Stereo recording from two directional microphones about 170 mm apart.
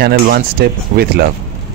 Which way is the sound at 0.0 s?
65° right (ahead or behind).